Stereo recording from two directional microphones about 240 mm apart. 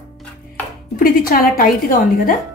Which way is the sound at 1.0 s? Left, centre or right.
Left.